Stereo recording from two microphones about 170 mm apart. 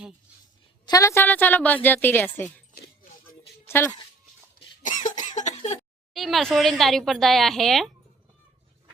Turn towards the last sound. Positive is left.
turn(degrees=0)  # may be behind; listen again after turning